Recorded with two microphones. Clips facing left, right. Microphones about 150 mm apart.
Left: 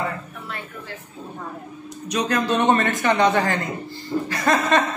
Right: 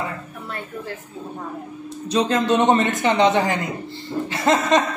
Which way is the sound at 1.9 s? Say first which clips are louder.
Right 3 dB; 30° right (ahead or behind).